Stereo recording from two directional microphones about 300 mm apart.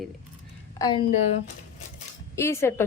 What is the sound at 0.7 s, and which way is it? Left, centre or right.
Speech, centre.